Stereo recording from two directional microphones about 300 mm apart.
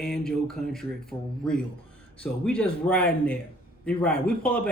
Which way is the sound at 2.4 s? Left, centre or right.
Centre.